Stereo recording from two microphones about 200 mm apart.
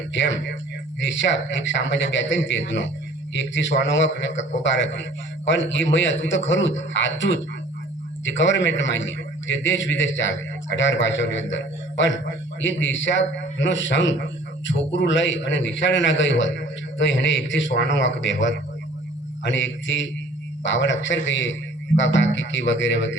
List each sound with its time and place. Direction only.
0.1 s a man's voice: 65° left (ahead or behind)